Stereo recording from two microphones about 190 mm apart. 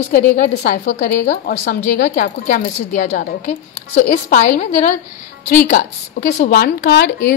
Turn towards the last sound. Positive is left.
turn(degrees=55)  # may be behind; listen again after turning